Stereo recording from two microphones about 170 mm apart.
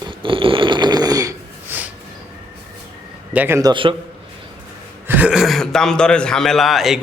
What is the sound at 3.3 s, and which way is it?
Speech, 10° right (ahead or behind).